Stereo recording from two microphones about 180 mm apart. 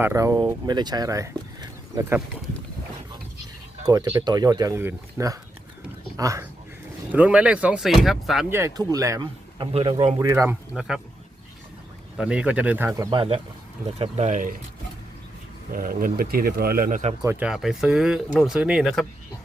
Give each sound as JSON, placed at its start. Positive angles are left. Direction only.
{"t": 0.0, "sound": "speech", "side_deg": -15}
{"t": 3.8, "sound": "speech", "side_deg": -20}
{"t": 7.1, "sound": "speech", "side_deg": -10}
{"t": 8.4, "sound": "speech", "side_deg": -15}
{"t": 10.2, "sound": "speech", "side_deg": -15}
{"t": 10.8, "sound": "speech", "side_deg": -5}
{"t": 12.1, "sound": "speech", "side_deg": -5}
{"t": 13.1, "sound": "speech", "side_deg": -30}
{"t": 15.7, "sound": "speech", "side_deg": -50}
{"t": 17.2, "sound": "speech", "side_deg": -5}